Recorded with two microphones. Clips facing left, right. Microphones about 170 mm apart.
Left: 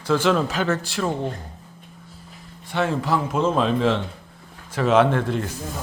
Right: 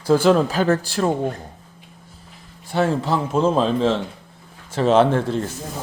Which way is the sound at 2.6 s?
35° right (ahead or behind).